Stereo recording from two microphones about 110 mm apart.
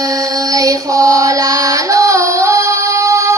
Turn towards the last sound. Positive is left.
turn(degrees=-25)  # may be behind; listen again after turning